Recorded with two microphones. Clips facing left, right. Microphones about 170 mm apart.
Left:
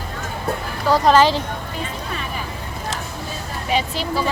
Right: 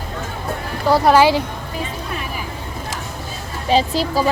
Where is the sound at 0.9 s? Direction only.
10° right (ahead or behind).